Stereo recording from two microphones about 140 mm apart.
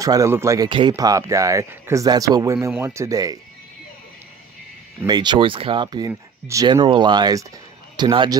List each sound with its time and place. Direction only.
0.0 s speech: 25° right (ahead or behind)
0.7 s speech: 35° right (ahead or behind)
5.0 s a man's voice: 30° right (ahead or behind)